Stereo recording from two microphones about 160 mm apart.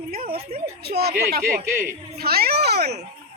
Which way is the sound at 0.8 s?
80° right.